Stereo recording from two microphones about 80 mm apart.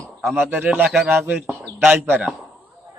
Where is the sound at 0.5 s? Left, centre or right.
Right.